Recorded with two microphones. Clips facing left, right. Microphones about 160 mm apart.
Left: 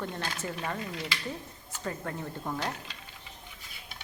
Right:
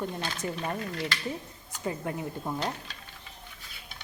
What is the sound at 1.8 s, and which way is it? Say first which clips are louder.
Speech: right 3 dB; 15° right (ahead or behind).